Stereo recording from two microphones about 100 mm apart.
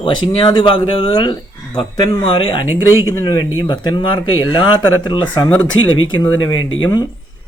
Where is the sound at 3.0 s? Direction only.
30° left (ahead or behind).